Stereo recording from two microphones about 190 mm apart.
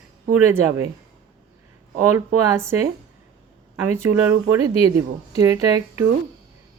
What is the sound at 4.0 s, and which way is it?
Speech, 10° right (ahead or behind).